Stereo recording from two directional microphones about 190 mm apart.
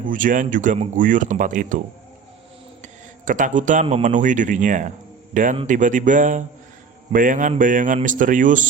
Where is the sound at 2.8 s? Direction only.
45° right (ahead or behind).